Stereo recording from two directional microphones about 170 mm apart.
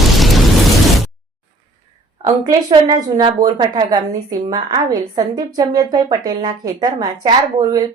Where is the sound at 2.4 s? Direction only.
25° right (ahead or behind).